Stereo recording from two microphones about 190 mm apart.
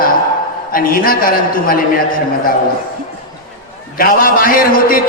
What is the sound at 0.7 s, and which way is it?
A man's voice, 50° left (ahead or behind).